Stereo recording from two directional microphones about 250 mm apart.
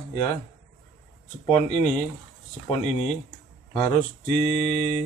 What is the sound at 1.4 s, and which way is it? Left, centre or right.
Speech, left.